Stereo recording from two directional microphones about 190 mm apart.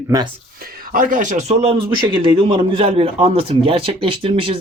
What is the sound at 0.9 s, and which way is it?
A man's voice, 45° right (ahead or behind).